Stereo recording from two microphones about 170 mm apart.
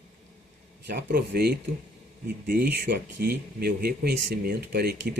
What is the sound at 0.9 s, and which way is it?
Speech, 75° right (ahead or behind).